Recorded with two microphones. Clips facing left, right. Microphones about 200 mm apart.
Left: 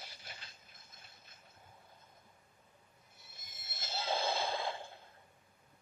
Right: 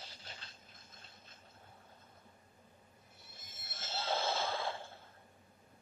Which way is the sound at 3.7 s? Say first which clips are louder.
Even; 10° left (ahead or behind).